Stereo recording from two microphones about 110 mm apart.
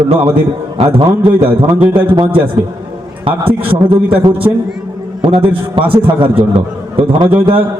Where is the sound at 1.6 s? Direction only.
50° right (ahead or behind).